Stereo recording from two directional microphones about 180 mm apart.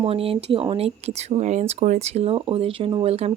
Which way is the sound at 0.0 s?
30° right (ahead or behind).